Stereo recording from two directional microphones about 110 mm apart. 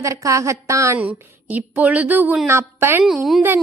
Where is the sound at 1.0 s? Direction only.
15° right (ahead or behind).